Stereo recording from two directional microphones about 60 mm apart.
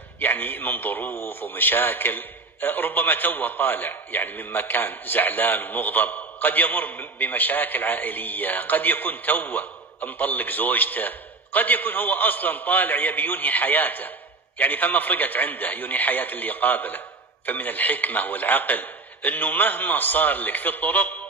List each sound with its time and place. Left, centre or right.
0.2 s a man's voice: left